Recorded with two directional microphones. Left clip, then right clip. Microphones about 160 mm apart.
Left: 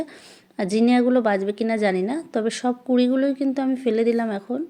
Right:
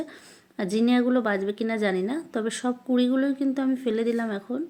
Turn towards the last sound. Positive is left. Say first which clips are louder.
# left 4 dB
turn(degrees=30)  # may be behind; listen again after turning